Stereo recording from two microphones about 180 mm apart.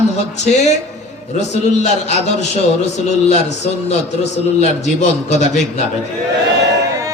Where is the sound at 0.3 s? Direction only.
40° left (ahead or behind).